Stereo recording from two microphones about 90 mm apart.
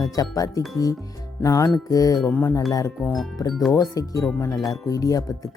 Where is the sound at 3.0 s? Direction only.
Centre (ahead or behind).